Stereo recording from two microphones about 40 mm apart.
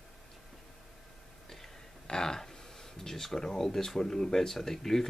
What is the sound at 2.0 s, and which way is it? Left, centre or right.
Speech, centre.